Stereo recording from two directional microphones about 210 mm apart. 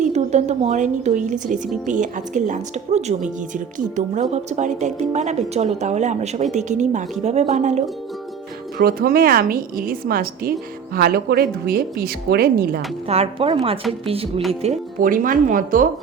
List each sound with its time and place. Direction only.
0.0 s speech: 35° right (ahead or behind)
8.8 s a woman's voice: 45° right (ahead or behind)
13.1 s speech: 30° right (ahead or behind)